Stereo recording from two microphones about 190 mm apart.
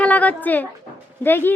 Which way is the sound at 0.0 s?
5° left (ahead or behind).